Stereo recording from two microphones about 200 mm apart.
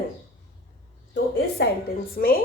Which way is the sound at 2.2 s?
45° left (ahead or behind).